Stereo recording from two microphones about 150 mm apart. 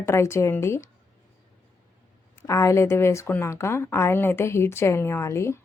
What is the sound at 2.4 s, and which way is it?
A woman's voice, 20° left (ahead or behind).